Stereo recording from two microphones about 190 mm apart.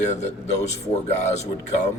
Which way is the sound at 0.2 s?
35° left (ahead or behind).